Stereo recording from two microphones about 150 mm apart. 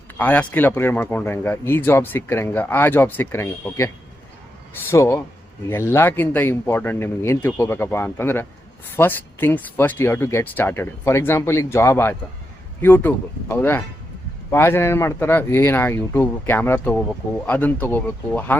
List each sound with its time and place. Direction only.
0.2 s speech: 10° left (ahead or behind)